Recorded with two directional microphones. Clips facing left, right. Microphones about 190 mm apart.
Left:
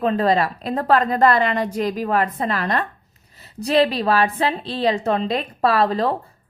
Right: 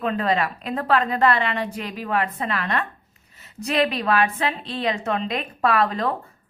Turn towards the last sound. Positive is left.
turn(degrees=35)  # may be behind; listen again after turning